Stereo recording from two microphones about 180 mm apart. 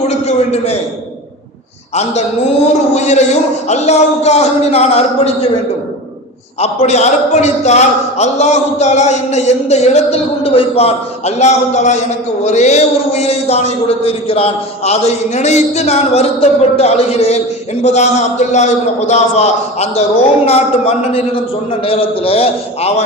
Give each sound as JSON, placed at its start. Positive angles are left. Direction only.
{"t": 0.1, "sound": "a man's voice", "side_deg": 35}
{"t": 2.9, "sound": "a man's voice", "side_deg": 40}
{"t": 6.6, "sound": "a man's voice", "side_deg": 40}